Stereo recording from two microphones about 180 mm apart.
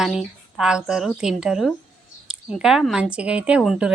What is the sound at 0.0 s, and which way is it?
Speech, centre (ahead or behind).